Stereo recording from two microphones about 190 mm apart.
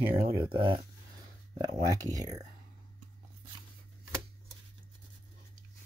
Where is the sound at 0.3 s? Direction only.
25° right (ahead or behind).